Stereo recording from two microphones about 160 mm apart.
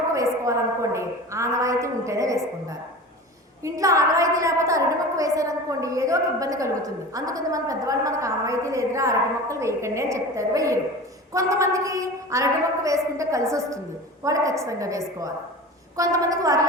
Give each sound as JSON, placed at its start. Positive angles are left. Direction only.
{"t": 0.1, "sound": "a woman's voice", "side_deg": -20}